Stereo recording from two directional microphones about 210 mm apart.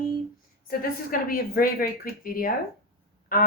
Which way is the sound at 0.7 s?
45° left (ahead or behind).